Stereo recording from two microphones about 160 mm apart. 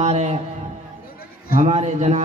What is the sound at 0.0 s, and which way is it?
Speech, 45° right (ahead or behind).